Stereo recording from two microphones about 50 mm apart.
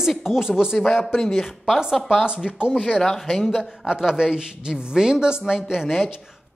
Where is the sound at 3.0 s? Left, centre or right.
Centre.